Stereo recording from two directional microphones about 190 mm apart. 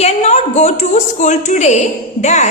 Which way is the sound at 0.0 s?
35° left (ahead or behind).